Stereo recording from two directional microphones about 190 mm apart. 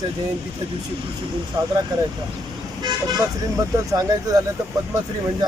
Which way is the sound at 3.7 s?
20° right (ahead or behind).